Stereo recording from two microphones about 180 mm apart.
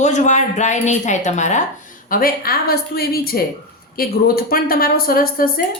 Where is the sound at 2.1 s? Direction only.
55° left (ahead or behind).